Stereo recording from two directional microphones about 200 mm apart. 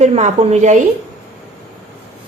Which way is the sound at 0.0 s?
35° right (ahead or behind).